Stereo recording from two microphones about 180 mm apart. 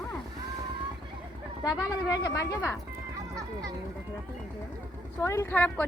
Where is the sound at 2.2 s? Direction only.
20° left (ahead or behind).